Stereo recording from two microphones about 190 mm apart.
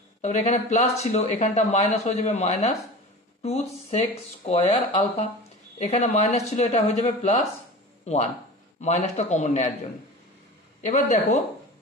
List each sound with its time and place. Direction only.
0.2 s speech: 35° left (ahead or behind)
4.5 s speech: 35° left (ahead or behind)
10.9 s speech: 40° left (ahead or behind)